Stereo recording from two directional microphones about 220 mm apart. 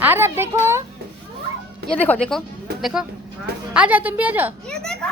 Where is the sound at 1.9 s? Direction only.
5° left (ahead or behind).